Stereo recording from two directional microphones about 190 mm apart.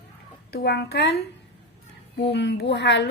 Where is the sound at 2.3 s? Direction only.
65° left (ahead or behind).